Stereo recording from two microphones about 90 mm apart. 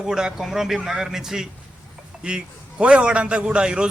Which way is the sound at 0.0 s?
5° right (ahead or behind).